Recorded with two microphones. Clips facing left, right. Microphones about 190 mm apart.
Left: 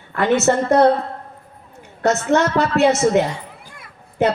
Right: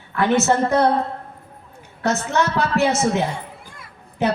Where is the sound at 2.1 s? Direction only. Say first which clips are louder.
Left 4 dB; 65° left (ahead or behind).